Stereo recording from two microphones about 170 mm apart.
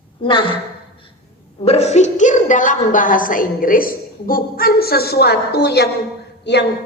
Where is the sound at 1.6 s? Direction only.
40° left (ahead or behind); by 6.7 s 85° left.